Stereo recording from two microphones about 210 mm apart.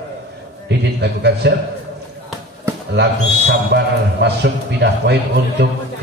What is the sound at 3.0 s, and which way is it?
A man's voice, 55° right (ahead or behind).